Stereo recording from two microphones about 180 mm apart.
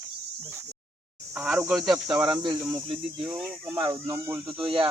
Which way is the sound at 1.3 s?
10° right (ahead or behind).